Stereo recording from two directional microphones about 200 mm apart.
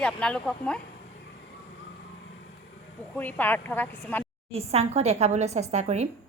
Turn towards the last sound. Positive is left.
turn(degrees=-35)  # may be behind; listen again after turning